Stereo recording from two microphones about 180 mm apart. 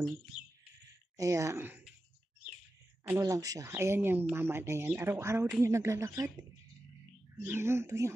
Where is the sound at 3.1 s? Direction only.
15° right (ahead or behind).